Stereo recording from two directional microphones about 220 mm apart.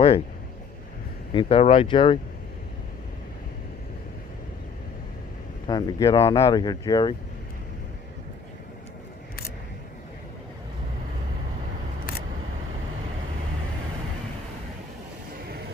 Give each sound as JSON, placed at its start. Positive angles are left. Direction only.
{"t": 1.3, "sound": "speech", "side_deg": 25}
{"t": 5.6, "sound": "speech", "side_deg": 20}